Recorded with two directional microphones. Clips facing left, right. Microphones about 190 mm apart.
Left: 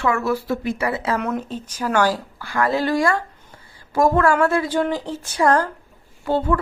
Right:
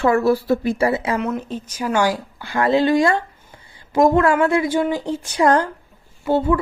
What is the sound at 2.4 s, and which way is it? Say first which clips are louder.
A woman's voice: right 4 dB; 25° right (ahead or behind).